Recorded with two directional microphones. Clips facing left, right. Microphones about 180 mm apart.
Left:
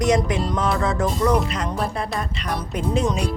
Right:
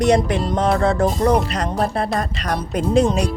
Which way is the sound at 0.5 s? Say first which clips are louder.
Right 7 dB; 50° right (ahead or behind).